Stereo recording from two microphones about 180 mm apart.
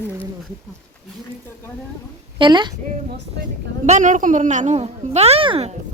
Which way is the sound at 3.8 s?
45° right (ahead or behind).